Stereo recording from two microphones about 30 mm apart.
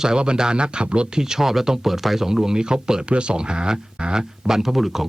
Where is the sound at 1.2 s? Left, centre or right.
Centre.